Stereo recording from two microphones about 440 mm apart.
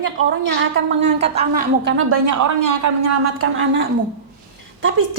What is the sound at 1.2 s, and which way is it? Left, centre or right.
A woman's voice, centre.